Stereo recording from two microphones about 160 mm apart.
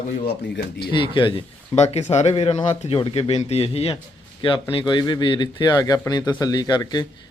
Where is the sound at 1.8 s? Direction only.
45° left (ahead or behind); by 7.0 s 25° left (ahead or behind).